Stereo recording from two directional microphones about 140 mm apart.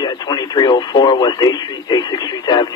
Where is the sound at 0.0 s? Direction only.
30° left (ahead or behind).